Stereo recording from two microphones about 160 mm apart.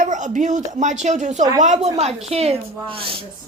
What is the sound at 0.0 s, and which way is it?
Speech, 50° right (ahead or behind).